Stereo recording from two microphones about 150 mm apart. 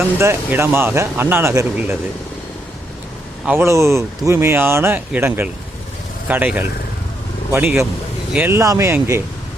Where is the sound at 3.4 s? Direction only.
15° right (ahead or behind).